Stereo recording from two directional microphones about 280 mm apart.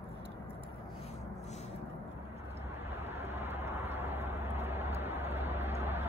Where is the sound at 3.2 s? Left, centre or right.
Right.